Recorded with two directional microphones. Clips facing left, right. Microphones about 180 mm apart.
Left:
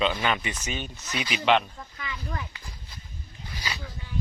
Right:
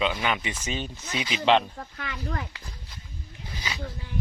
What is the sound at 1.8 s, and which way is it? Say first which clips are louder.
Speech: right 2 dB; 60° right (ahead or behind).